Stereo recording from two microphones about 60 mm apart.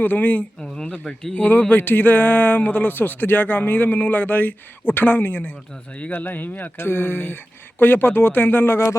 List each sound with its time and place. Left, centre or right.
0.0 s speech: left
0.6 s speech: centre
1.4 s speech: left